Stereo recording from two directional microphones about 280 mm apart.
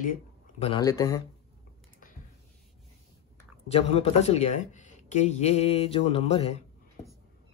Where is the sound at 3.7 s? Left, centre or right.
Left.